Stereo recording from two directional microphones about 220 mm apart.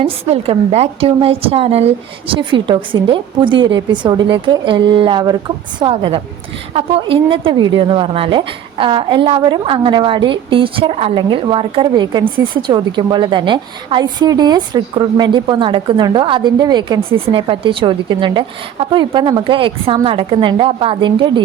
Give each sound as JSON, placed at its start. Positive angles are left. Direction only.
{"t": 0.0, "sound": "a woman's voice", "side_deg": -25}